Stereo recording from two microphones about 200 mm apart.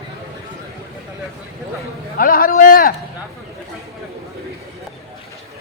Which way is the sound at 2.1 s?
45° left (ahead or behind).